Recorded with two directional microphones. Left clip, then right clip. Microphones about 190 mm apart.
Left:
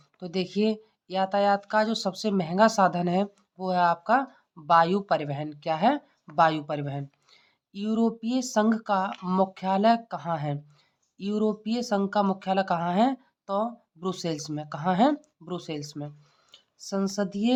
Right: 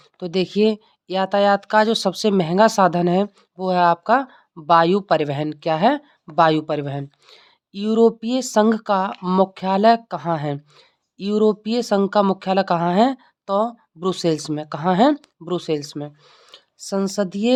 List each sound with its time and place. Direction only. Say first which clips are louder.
0.2 s speech: right 9 dB; 50° right (ahead or behind)